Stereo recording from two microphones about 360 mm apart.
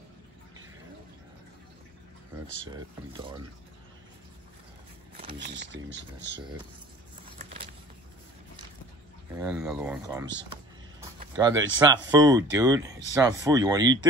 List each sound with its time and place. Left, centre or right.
2.6 s speech: centre
5.1 s speech: right
7.4 s a sound: centre
9.4 s speech: centre
10.5 s a sound: centre
11.5 s speech: right
11.8 s speech: centre